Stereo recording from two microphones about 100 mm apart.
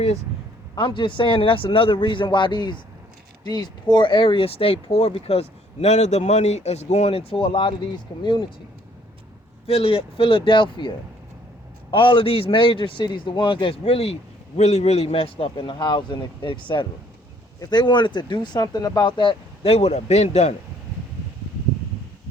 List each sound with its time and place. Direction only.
0.8 s a man's voice: 55° left (ahead or behind)
9.6 s a man's voice: 75° left (ahead or behind); by 19.4 s 50° left (ahead or behind)
19.6 s a man's voice: 90° left